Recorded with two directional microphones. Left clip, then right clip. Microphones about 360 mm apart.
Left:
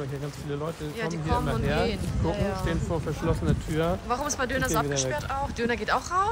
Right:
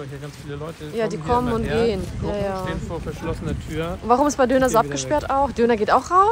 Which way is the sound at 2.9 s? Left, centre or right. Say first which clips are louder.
Even; left.